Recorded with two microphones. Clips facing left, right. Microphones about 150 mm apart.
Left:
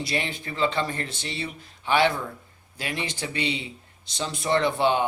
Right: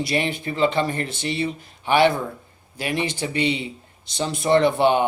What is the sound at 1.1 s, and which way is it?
Speech, 60° right (ahead or behind).